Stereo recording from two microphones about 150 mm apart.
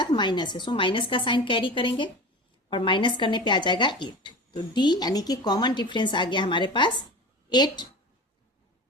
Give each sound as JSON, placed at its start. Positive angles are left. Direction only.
{"t": 0.0, "sound": "a woman's voice", "side_deg": 30}